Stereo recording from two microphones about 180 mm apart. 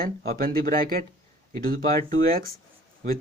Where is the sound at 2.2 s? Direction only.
55° right (ahead or behind).